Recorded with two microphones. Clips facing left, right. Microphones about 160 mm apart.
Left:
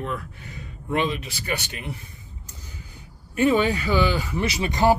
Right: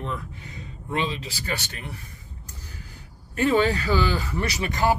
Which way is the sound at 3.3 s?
15° left (ahead or behind).